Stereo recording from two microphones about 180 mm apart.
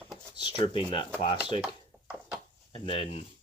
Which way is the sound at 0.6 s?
30° left (ahead or behind).